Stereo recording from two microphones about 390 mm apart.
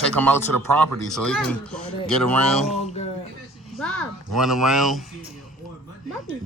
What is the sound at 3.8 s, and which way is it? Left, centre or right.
Speech, centre.